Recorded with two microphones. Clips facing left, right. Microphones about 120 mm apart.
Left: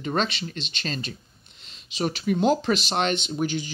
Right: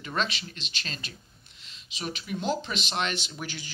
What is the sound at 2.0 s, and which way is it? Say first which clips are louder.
Speech: left 10 dB; 50° left (ahead or behind).